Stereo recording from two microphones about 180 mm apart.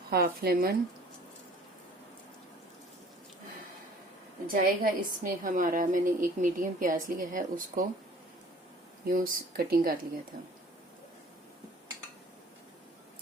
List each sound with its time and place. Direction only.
0.1 s speech: 55° right (ahead or behind)
4.4 s a woman's voice: 55° right (ahead or behind)
9.0 s a woman's voice: 50° right (ahead or behind)